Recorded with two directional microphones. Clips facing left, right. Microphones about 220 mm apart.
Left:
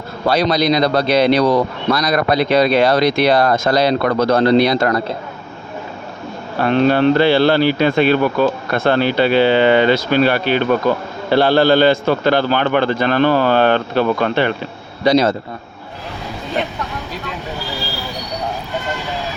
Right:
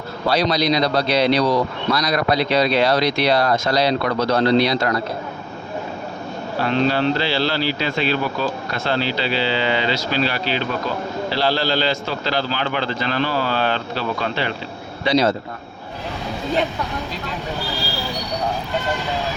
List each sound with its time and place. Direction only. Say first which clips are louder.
0.3 s speech: left 4 dB; 50° left (ahead or behind)
6.6 s speech: left 6 dB; 55° left (ahead or behind)